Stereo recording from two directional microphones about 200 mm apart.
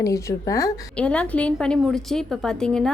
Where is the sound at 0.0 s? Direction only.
15° left (ahead or behind).